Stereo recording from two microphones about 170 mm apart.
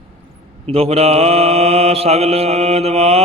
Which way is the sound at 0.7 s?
35° right (ahead or behind).